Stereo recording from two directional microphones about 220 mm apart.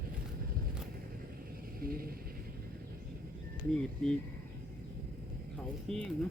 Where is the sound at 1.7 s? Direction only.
40° right (ahead or behind).